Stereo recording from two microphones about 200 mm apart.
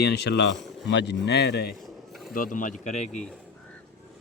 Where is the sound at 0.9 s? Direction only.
60° left (ahead or behind).